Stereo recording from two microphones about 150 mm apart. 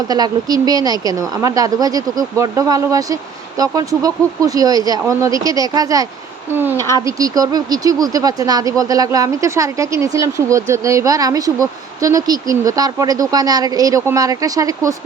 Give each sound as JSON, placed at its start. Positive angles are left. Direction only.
{"t": 0.1, "sound": "speech", "side_deg": -25}